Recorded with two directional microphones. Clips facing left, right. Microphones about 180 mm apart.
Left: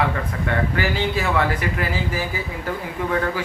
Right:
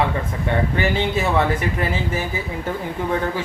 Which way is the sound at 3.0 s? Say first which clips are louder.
Right 1 dB; 25° right (ahead or behind).